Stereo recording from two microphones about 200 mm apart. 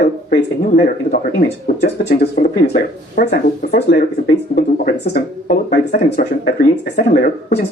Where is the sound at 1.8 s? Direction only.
55° left (ahead or behind).